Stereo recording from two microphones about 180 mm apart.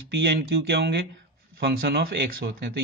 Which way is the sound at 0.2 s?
65° right (ahead or behind).